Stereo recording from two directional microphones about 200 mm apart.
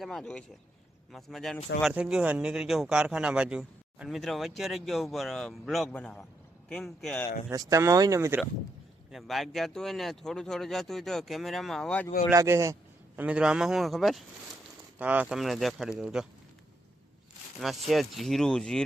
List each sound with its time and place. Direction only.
0.0 s speech: centre (ahead or behind)
7.5 s speech: 15° right (ahead or behind)
9.1 s speech: centre (ahead or behind)
12.3 s speech: 15° right (ahead or behind)
17.6 s speech: centre (ahead or behind)